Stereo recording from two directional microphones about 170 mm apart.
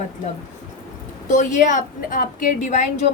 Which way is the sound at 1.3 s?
45° left (ahead or behind).